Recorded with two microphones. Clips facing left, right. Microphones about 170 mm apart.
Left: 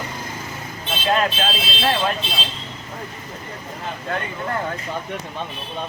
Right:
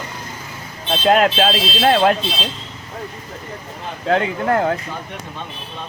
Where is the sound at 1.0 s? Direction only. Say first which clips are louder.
Right 6 dB; 70° right (ahead or behind).